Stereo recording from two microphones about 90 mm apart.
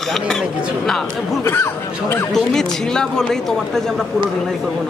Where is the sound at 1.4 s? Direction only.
25° left (ahead or behind).